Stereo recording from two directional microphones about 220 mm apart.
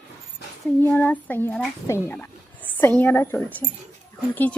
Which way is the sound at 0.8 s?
10° left (ahead or behind).